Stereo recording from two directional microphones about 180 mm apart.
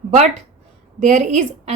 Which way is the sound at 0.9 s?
40° right (ahead or behind).